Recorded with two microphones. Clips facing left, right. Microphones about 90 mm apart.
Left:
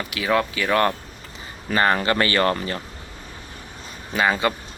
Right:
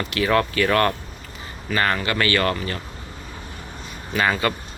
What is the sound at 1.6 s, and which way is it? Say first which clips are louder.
Speech: left 3 dB; 25° left (ahead or behind).